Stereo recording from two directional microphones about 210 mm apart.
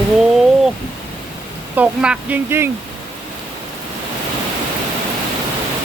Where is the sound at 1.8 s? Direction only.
5° right (ahead or behind).